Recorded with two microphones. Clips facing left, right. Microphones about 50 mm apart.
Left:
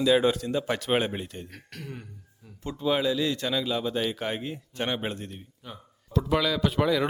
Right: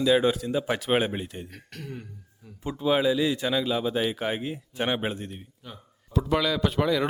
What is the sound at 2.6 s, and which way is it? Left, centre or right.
A man's voice, centre.